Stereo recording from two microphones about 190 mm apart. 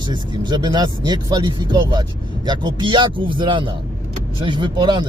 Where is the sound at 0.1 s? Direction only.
20° right (ahead or behind).